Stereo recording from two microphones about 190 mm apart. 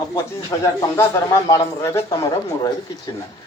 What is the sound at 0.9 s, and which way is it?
Speech, 15° left (ahead or behind).